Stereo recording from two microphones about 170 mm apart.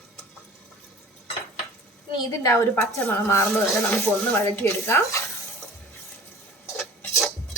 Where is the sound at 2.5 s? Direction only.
15° left (ahead or behind).